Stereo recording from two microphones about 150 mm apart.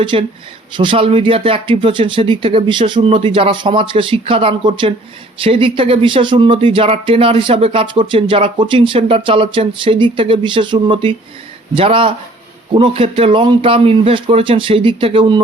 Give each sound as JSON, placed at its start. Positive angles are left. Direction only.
{"t": 0.0, "sound": "speech", "side_deg": -35}